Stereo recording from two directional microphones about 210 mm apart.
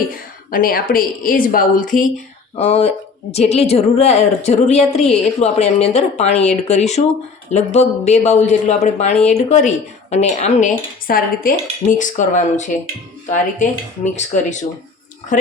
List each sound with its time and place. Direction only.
0.1 s a woman's voice: 45° left (ahead or behind)
2.6 s a woman's voice: 30° left (ahead or behind)